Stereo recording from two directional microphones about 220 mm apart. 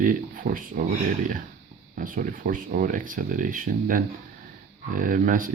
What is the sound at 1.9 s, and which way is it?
Speech, 40° right (ahead or behind).